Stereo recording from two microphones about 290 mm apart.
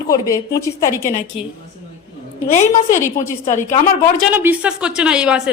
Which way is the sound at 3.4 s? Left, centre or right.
Left.